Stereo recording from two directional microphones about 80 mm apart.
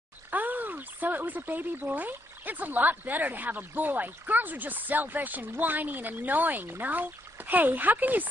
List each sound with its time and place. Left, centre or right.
0.3 s speech: right